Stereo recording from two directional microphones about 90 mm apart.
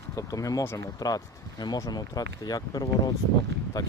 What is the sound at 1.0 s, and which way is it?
Speech, 45° left (ahead or behind).